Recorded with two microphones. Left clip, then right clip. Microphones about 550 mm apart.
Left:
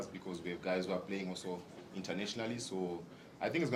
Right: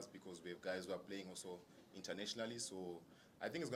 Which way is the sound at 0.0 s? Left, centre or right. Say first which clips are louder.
Left 10 dB; right.